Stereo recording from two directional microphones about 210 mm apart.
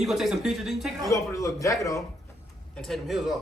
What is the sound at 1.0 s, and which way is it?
Speech, 15° left (ahead or behind).